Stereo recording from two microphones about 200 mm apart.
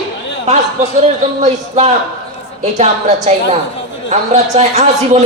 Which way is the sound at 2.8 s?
35° right (ahead or behind).